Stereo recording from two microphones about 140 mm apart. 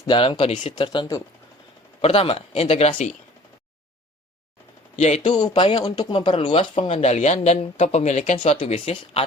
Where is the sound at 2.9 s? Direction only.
60° left (ahead or behind).